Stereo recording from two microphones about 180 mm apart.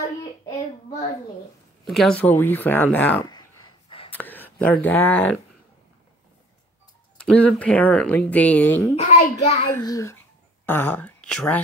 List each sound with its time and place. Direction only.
1.9 s speech: centre (ahead or behind)
3.3 s a sound: 25° left (ahead or behind)
4.1 s a sound: 10° left (ahead or behind)
4.8 s speech: 10° left (ahead or behind)
7.2 s speech: 5° left (ahead or behind)
8.9 s a child's voice: 35° left (ahead or behind)
9.7 s speech: 15° left (ahead or behind)